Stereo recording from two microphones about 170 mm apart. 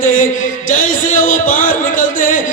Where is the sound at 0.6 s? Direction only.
50° left (ahead or behind).